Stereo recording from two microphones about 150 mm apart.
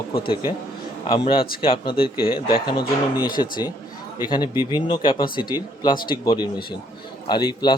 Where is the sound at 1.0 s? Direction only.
35° left (ahead or behind).